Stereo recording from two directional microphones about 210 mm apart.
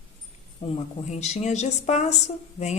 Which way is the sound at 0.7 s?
30° left (ahead or behind).